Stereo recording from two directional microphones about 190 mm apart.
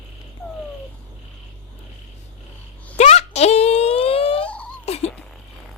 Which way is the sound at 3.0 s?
35° left (ahead or behind).